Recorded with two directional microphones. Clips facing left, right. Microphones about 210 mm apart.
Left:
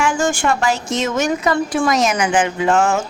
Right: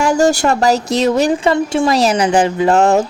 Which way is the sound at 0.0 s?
40° right (ahead or behind).